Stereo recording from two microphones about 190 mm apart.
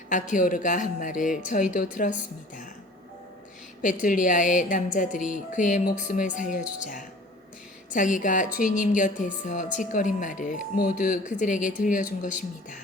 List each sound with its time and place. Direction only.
0.1 s a woman's voice: 40° left (ahead or behind)
3.8 s a woman's voice: 45° left (ahead or behind)